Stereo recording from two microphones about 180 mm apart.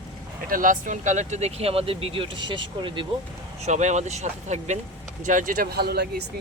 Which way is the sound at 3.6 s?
40° right (ahead or behind).